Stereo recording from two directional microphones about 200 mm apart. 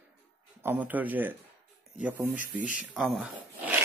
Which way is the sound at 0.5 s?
10° right (ahead or behind).